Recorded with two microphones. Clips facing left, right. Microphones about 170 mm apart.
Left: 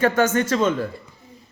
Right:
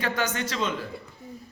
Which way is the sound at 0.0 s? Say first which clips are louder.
Left 10 dB; 50° left (ahead or behind).